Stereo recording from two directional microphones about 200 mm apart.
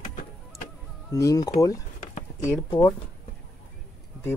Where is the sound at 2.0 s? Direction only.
40° left (ahead or behind).